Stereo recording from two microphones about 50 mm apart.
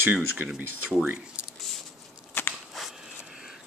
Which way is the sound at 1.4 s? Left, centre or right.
Right.